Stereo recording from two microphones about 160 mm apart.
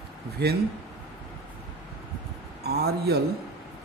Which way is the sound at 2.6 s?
80° right.